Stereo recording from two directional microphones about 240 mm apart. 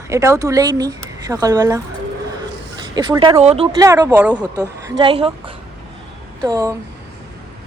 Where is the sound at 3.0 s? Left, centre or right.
Centre.